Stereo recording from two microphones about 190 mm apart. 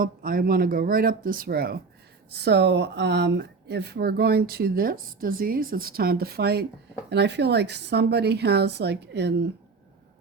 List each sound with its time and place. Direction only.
0.0 s speech: 50° right (ahead or behind)